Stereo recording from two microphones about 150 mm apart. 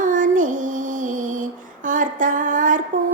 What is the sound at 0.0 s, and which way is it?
Female singing, 60° right (ahead or behind).